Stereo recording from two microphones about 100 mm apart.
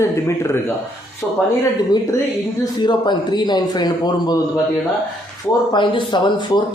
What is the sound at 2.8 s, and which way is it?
Speech, 50° left (ahead or behind).